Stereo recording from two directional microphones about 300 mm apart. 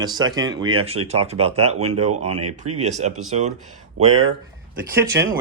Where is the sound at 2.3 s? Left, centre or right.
Right.